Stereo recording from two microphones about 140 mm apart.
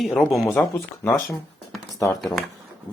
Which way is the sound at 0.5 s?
20° left (ahead or behind).